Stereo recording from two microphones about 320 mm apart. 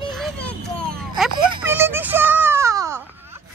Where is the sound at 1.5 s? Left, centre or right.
Centre.